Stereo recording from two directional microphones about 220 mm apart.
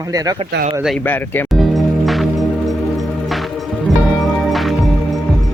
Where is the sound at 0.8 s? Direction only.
5° left (ahead or behind).